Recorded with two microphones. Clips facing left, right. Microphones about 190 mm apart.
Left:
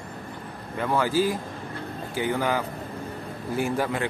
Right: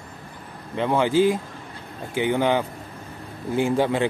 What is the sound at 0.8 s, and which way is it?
Speech, 20° right (ahead or behind).